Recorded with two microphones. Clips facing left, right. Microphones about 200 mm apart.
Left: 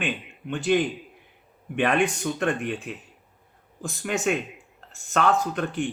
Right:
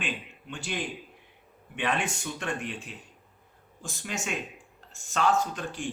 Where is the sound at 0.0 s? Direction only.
60° left (ahead or behind).